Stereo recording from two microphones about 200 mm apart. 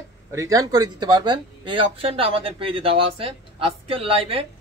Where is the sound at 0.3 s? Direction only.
15° right (ahead or behind).